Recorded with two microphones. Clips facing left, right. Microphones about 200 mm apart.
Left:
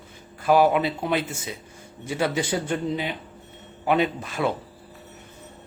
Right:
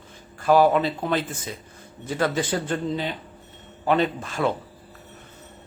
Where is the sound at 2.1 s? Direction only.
10° left (ahead or behind).